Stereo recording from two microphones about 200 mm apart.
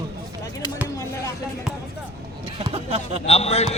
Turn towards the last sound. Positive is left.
turn(degrees=30)  # may be behind; listen again after turning